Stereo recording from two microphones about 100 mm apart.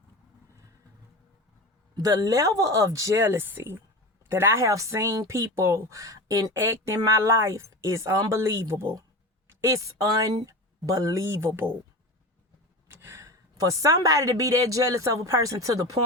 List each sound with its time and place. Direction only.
2.0 s speech: 35° right (ahead or behind)
12.9 s speech: 25° right (ahead or behind)